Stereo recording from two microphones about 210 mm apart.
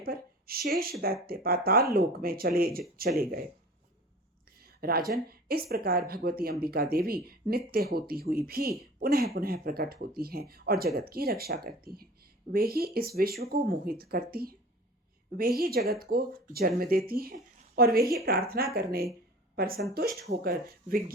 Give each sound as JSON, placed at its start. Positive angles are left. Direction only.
{"t": 0.0, "sound": "speech", "side_deg": -45}
{"t": 4.5, "sound": "speech", "side_deg": -45}